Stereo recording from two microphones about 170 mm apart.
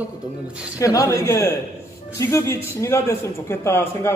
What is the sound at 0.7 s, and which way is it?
A man's voice, 20° left (ahead or behind).